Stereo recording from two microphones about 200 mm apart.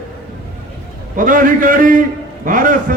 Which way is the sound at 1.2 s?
45° right (ahead or behind).